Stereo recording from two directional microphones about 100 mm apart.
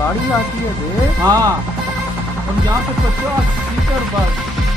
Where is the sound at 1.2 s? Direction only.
35° right (ahead or behind).